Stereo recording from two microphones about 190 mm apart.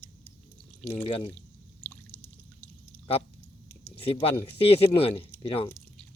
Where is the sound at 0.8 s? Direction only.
10° left (ahead or behind).